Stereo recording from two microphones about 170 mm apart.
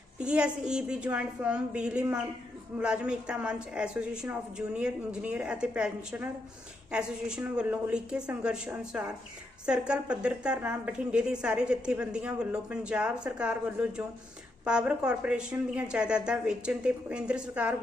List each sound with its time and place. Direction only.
0.2 s a woman's voice: 5° right (ahead or behind)